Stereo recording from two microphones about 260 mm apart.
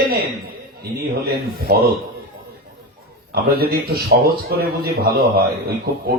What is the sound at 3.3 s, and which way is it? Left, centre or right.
A man's voice, right.